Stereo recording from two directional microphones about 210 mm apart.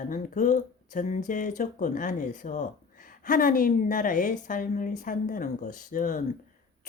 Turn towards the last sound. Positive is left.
turn(degrees=40)  # may be behind; listen again after turning